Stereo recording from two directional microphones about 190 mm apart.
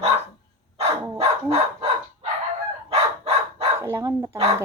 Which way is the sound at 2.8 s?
30° right (ahead or behind).